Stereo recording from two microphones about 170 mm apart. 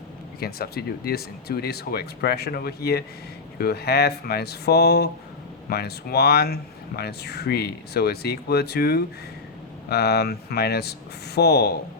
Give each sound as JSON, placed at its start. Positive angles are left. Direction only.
{"t": 0.3, "sound": "speech", "side_deg": 65}